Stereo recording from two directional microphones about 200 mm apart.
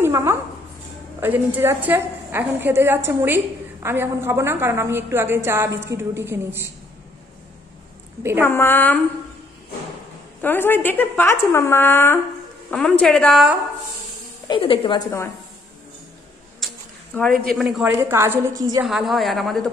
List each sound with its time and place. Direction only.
0.0 s a sound: 15° right (ahead or behind)
1.2 s a woman's voice: 10° right (ahead or behind)
8.2 s a woman's voice: 10° right (ahead or behind)
8.5 s a woman's voice: 10° left (ahead or behind)
10.4 s a woman's voice: 10° left (ahead or behind)
14.5 s speech: 25° left (ahead or behind)
16.5 s speech: 5° left (ahead or behind); by 18.9 s 20° right (ahead or behind)
18.9 s a woman's voice: centre (ahead or behind)